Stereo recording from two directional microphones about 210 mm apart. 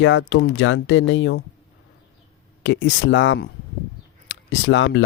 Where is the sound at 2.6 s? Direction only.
60° left (ahead or behind).